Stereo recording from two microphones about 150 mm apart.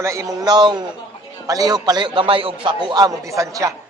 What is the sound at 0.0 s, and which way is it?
A man's voice, 20° right (ahead or behind).